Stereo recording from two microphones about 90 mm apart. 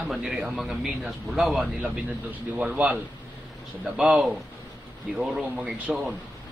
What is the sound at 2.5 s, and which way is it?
A man's voice, 15° right (ahead or behind).